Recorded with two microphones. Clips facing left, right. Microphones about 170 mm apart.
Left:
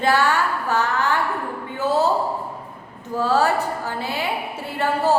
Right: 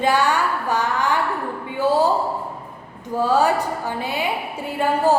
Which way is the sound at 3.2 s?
15° right (ahead or behind).